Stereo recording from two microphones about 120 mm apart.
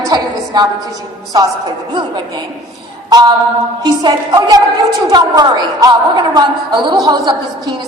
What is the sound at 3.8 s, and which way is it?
A woman's voice, 35° right (ahead or behind).